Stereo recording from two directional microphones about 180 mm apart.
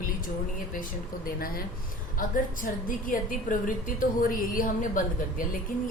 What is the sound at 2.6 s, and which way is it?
A woman's voice, 50° left (ahead or behind).